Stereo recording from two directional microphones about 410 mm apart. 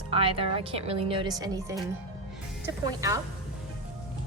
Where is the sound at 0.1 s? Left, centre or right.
Centre.